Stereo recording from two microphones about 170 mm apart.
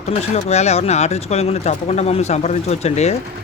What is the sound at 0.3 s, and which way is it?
Speech, 40° left (ahead or behind).